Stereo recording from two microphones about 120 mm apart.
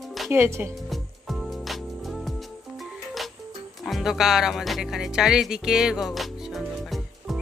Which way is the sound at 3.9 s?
Centre (ahead or behind).